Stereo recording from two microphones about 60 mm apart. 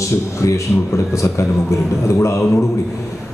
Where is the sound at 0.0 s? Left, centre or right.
Left.